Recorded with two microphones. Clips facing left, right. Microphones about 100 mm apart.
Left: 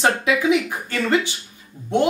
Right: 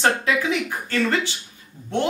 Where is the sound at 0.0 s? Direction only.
15° left (ahead or behind).